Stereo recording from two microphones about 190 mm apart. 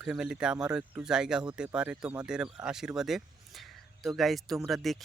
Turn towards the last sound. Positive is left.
turn(degrees=0)  # may be behind; listen again after turning